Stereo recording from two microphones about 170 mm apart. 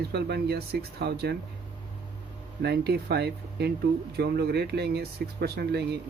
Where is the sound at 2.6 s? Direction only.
75° right (ahead or behind).